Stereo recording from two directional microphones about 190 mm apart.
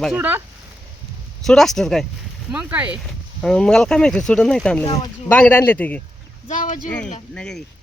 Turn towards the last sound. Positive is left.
turn(degrees=5)  # may be behind; listen again after turning